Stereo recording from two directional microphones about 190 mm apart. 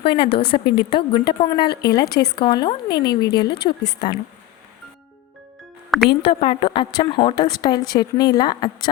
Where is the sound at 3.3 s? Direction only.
60° left (ahead or behind).